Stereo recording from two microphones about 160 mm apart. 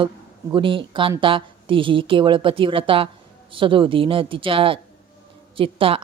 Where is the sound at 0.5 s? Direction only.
30° right (ahead or behind).